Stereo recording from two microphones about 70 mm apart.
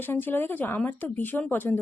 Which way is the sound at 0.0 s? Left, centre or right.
Left.